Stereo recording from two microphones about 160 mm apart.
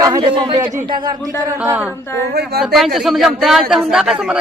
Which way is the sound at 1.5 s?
15° right (ahead or behind).